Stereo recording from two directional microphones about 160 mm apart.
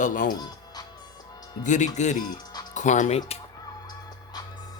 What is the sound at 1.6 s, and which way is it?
Speech, 50° left (ahead or behind).